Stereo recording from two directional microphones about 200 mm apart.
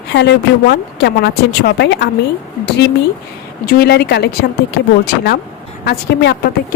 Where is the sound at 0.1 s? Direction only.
60° left (ahead or behind).